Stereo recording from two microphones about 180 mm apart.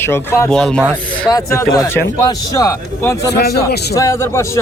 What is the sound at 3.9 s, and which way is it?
Speech, 15° left (ahead or behind).